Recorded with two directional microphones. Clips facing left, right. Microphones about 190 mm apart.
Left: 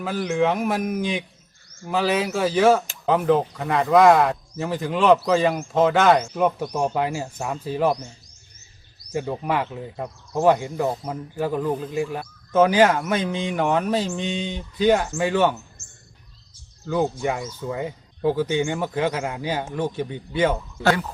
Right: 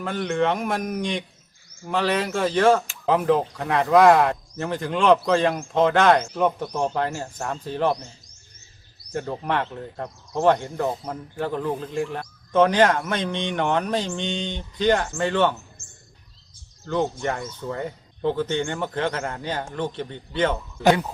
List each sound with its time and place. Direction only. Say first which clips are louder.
0.0 s speech: left 1 dB; 5° left (ahead or behind)
9.1 s speech: left 1 dB; 5° left (ahead or behind)
16.8 s speech: left 2 dB; 5° left (ahead or behind)
20.8 s speech: right 2 dB; 20° right (ahead or behind)